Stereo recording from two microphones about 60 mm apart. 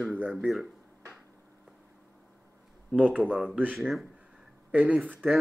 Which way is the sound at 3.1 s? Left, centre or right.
Right.